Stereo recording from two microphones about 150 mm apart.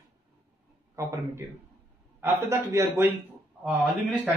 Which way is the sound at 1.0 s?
20° right (ahead or behind).